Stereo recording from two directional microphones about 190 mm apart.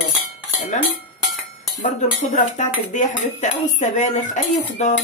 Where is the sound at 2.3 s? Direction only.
40° left (ahead or behind).